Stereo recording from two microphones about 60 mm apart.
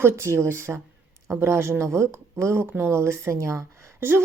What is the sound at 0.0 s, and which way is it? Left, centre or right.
A woman's voice, right.